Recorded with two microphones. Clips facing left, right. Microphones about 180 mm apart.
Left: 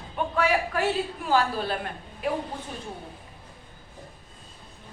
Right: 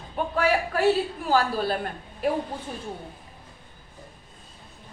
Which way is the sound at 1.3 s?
40° right (ahead or behind).